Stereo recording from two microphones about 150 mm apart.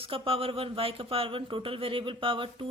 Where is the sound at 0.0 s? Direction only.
40° right (ahead or behind).